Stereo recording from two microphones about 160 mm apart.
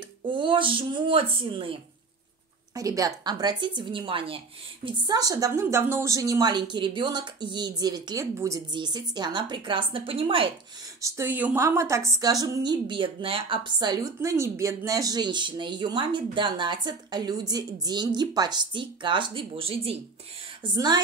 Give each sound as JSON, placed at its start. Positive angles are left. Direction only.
{"t": 0.3, "sound": "speech", "side_deg": -30}
{"t": 2.7, "sound": "a woman's voice", "side_deg": -20}
{"t": 11.0, "sound": "a woman's voice", "side_deg": -20}
{"t": 20.6, "sound": "a woman's voice", "side_deg": -25}